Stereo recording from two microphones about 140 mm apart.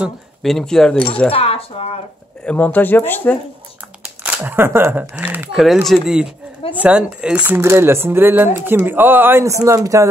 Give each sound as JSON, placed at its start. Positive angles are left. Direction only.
{"t": 0.0, "sound": "speech", "side_deg": 0}
{"t": 1.3, "sound": "speech", "side_deg": 45}
{"t": 2.4, "sound": "speech", "side_deg": 10}
{"t": 4.4, "sound": "speech", "side_deg": -15}
{"t": 5.9, "sound": "speech", "side_deg": 0}